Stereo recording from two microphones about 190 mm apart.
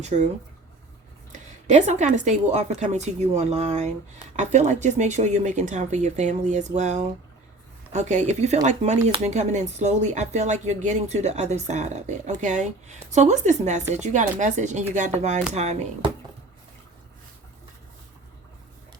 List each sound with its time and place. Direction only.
1.3 s speech: 40° right (ahead or behind)